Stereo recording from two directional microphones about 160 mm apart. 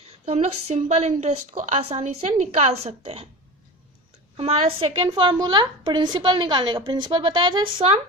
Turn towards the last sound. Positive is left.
turn(degrees=-35)  # may be behind; listen again after turning